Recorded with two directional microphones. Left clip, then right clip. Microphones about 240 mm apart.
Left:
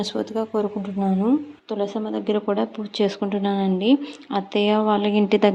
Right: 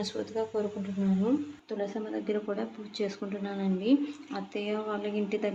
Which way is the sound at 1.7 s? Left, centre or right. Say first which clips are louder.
Left 9 dB; left.